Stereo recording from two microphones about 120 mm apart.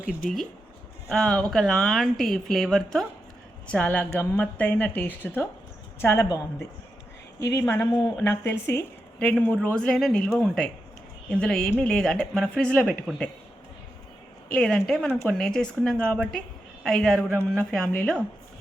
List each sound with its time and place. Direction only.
0.2 s a woman's voice: 5° left (ahead or behind)
3.7 s a woman's voice: 10° left (ahead or behind)
9.1 s a woman's voice: 10° left (ahead or behind)
14.5 s a woman's voice: 5° left (ahead or behind)